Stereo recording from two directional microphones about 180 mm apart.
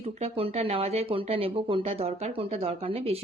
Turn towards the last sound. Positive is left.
turn(degrees=-35)  # may be behind; listen again after turning